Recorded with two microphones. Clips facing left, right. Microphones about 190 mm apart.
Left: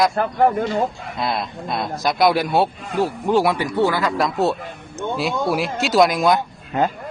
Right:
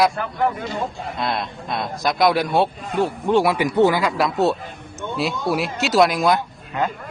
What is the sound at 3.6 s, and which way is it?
Speech, 15° right (ahead or behind).